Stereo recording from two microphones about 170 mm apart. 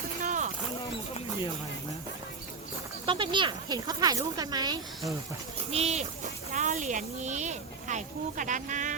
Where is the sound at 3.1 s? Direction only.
30° right (ahead or behind).